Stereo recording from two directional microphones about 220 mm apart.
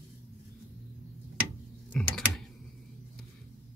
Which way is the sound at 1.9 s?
Centre (ahead or behind).